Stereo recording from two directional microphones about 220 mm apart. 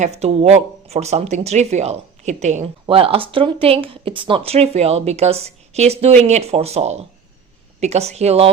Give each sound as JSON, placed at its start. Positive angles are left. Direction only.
{"t": 0.0, "sound": "speech", "side_deg": -30}